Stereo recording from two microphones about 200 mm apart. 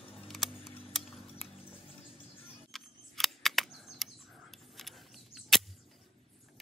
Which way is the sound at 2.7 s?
Centre (ahead or behind).